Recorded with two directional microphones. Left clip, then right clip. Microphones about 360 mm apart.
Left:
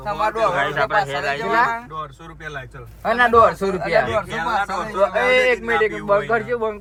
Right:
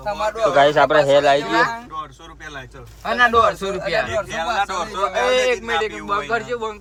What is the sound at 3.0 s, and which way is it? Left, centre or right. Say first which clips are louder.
A man's voice: left 1 dB; centre.